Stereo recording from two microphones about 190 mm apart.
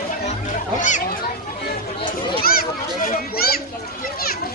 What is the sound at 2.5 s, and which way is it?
Children playing, 50° left (ahead or behind).